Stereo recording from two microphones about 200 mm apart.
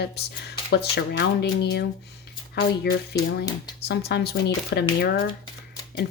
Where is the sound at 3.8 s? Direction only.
55° left (ahead or behind).